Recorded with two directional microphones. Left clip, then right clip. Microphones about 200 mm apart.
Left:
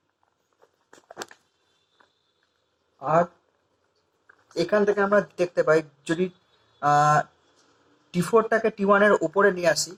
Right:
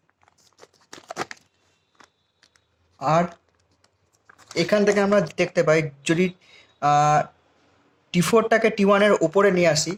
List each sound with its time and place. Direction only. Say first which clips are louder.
0.6 s crumpling: right 9 dB; 40° right (ahead or behind)
3.0 s speech: right 1 dB; 50° right (ahead or behind)
4.3 s speech: right 2 dB; 45° right (ahead or behind)